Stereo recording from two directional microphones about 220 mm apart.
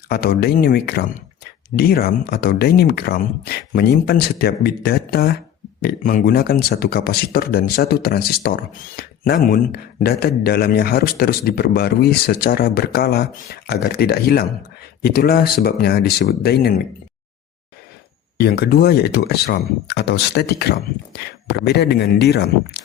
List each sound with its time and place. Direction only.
0.1 s speech: 45° left (ahead or behind)
18.3 s speech: 45° left (ahead or behind)